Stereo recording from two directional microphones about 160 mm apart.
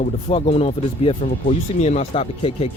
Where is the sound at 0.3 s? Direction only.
40° left (ahead or behind).